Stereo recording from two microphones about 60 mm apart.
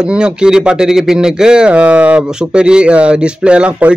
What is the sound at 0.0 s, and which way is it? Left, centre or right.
Speech, centre.